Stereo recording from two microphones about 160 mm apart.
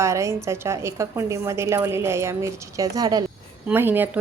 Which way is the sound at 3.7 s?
10° right (ahead or behind).